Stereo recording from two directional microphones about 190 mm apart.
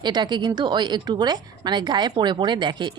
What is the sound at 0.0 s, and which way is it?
A woman's voice, 25° right (ahead or behind).